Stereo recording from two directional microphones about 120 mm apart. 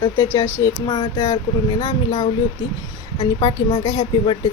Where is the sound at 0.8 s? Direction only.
45° left (ahead or behind).